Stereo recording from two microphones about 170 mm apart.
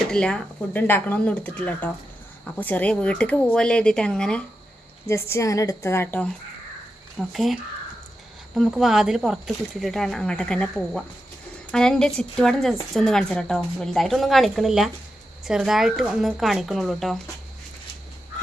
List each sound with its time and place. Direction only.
0.1 s speech: 5° left (ahead or behind)
5.0 s speech: 15° left (ahead or behind)
7.2 s speech: centre (ahead or behind)
11.7 s speech: 5° left (ahead or behind)